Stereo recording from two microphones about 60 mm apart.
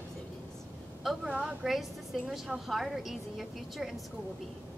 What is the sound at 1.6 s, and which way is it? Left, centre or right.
A woman's voice, centre.